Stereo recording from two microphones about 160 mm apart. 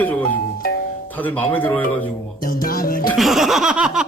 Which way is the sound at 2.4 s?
65° left (ahead or behind).